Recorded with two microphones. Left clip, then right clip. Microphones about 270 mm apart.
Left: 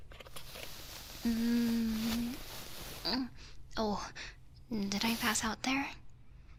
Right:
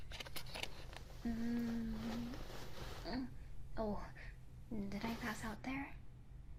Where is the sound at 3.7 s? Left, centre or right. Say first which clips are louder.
Left 8 dB; left.